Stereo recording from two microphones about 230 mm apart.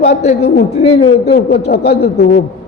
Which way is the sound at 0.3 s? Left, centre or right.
Left.